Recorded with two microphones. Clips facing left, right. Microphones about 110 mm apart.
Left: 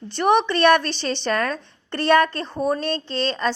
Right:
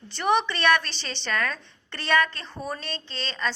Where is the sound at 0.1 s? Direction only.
50° left (ahead or behind).